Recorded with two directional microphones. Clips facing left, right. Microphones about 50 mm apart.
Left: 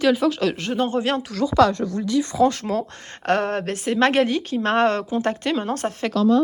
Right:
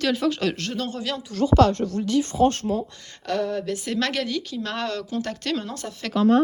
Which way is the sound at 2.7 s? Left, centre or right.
Left.